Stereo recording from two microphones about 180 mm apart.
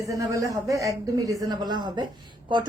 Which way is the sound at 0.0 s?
20° right (ahead or behind).